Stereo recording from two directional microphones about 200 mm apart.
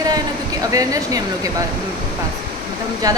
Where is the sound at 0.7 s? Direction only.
15° right (ahead or behind).